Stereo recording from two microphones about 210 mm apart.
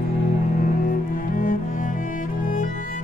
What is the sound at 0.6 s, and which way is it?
Cello, 40° left (ahead or behind).